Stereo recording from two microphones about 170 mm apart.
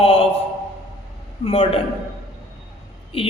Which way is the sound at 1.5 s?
35° left (ahead or behind).